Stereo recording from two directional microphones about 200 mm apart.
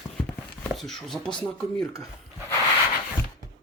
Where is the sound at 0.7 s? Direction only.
Centre (ahead or behind).